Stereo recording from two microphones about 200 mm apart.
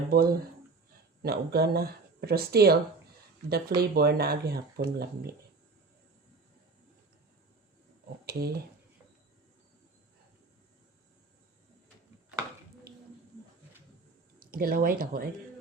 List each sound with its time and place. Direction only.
0.1 s speech: 50° right (ahead or behind)
3.8 s speech: 50° right (ahead or behind)
8.2 s speech: 50° right (ahead or behind)
14.3 s speech: 50° right (ahead or behind)